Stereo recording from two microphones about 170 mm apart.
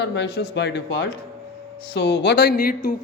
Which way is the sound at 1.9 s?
90° left.